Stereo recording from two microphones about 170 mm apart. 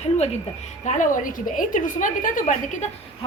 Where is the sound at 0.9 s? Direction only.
50° left (ahead or behind).